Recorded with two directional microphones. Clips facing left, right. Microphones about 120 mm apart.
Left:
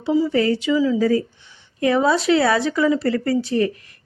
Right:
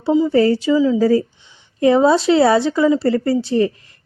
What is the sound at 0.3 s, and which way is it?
A woman's voice, 35° right (ahead or behind).